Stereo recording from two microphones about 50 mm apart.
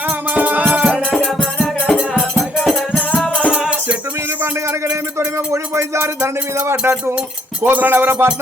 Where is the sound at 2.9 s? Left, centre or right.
Left.